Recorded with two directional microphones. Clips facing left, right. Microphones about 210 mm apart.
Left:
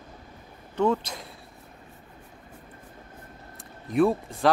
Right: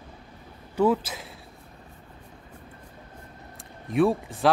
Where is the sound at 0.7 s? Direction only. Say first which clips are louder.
Right 2 dB; 5° right (ahead or behind).